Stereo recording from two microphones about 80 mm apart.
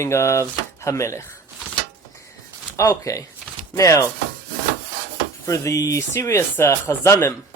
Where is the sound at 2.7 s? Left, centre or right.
Left.